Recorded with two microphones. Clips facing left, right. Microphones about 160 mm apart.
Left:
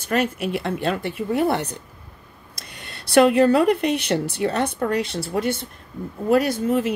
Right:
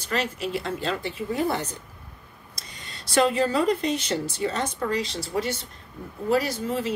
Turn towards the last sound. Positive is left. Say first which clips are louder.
# left 6 dB
turn(degrees=55)  # may be behind; listen again after turning